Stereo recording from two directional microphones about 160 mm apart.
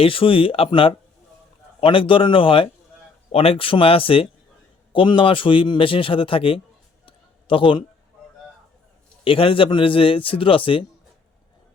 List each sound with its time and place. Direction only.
0.0 s a man's voice: 35° left (ahead or behind)
7.0 s a sound: 35° left (ahead or behind)
9.2 s a man's voice: 35° left (ahead or behind)